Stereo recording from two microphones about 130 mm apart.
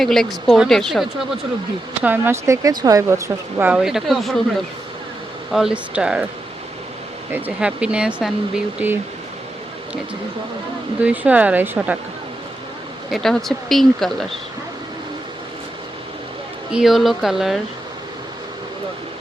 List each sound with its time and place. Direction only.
0.0 s speech: 5° left (ahead or behind)
2.0 s speech: 15° right (ahead or behind)
3.7 s speech: 5° right (ahead or behind)
5.5 s speech: 5° right (ahead or behind)
7.3 s speech: 10° right (ahead or behind)
11.0 s speech: 10° right (ahead or behind)
13.1 s speech: centre (ahead or behind)
16.7 s speech: centre (ahead or behind)